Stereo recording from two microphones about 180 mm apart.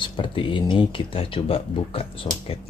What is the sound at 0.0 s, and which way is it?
Speech, 30° left (ahead or behind).